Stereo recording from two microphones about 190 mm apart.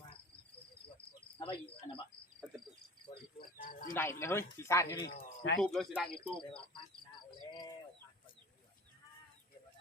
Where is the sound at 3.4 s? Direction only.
45° left (ahead or behind).